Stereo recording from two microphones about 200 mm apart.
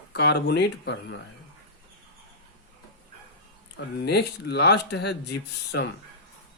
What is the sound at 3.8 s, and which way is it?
Speech, 55° left (ahead or behind).